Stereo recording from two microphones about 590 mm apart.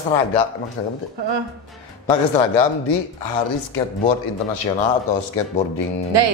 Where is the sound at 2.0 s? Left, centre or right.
Left.